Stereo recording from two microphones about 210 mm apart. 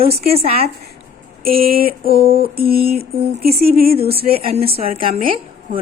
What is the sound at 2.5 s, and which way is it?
Speech, 45° right (ahead or behind).